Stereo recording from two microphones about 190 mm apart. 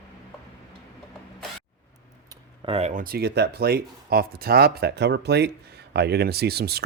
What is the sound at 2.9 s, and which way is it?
Speech, 50° right (ahead or behind).